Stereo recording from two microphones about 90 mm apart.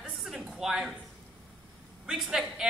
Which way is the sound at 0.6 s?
5° right (ahead or behind).